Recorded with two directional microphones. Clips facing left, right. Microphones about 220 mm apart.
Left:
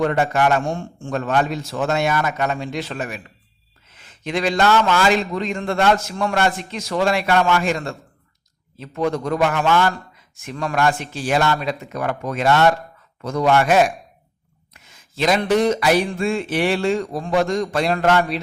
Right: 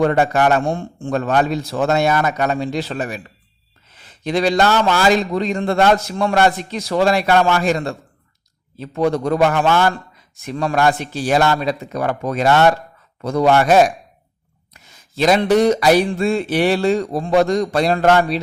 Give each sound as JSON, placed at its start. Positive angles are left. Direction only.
{"t": 0.0, "sound": "a man's voice", "side_deg": -35}